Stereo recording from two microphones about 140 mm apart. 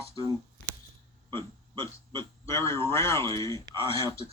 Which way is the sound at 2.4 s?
20° left (ahead or behind).